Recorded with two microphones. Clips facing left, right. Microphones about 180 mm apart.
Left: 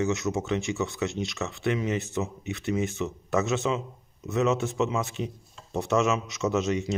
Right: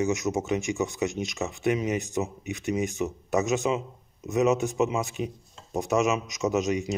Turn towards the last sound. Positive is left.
turn(degrees=-15)  # may be behind; listen again after turning